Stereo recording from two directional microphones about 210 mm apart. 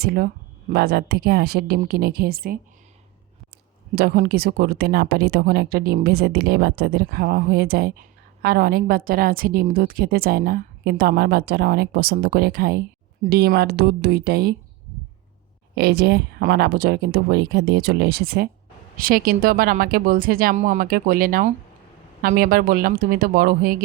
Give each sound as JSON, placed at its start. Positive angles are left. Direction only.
{"t": 0.0, "sound": "speech", "side_deg": -45}
{"t": 3.9, "sound": "speech", "side_deg": -45}
{"t": 15.7, "sound": "speech", "side_deg": -50}